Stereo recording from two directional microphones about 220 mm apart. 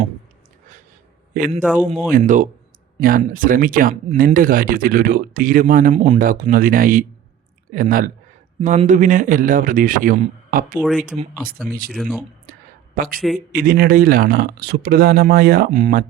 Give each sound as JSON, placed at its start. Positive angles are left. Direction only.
{"t": 1.3, "sound": "a man's voice", "side_deg": -35}
{"t": 10.8, "sound": "speech", "side_deg": -5}
{"t": 11.0, "sound": "speech", "side_deg": -35}
{"t": 11.9, "sound": "speech", "side_deg": 0}
{"t": 13.5, "sound": "speech", "side_deg": -40}